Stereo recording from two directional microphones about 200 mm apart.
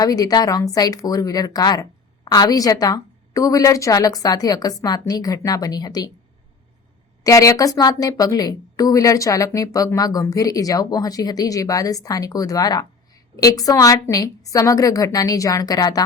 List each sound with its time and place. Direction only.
0.0 s speech: 20° left (ahead or behind)
7.3 s a woman's voice: 15° left (ahead or behind)